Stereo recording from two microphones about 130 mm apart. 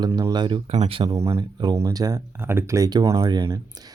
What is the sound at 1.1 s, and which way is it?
Speech, 25° right (ahead or behind).